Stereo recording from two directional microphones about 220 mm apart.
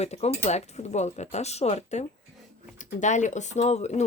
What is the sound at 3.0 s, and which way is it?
Speech, 35° left (ahead or behind).